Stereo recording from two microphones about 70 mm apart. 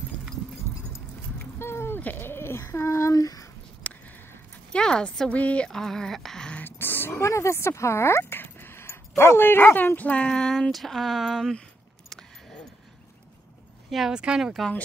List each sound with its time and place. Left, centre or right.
1.4 s speech: left
4.7 s speech: centre
5.3 s a sound: centre
5.7 s speech: centre
6.5 s a sound: left
7.2 s speech: left; by 11.6 s centre
12.1 s keys jangling: centre
13.8 s speech: centre